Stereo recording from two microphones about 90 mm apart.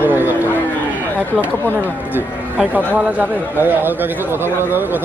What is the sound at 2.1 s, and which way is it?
A man's voice, 20° right (ahead or behind).